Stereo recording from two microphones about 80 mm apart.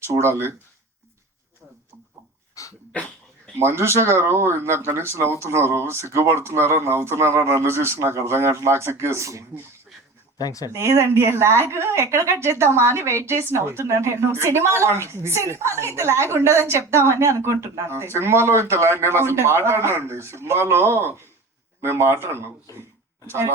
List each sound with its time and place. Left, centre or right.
0.1 s a woman's voice: right
2.6 s dog: left
2.9 s speech: centre
3.6 s a woman's voice: right
10.3 s speech: left
10.7 s a woman's voice: right